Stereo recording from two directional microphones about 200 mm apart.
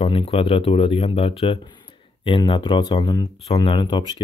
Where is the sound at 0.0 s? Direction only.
30° left (ahead or behind).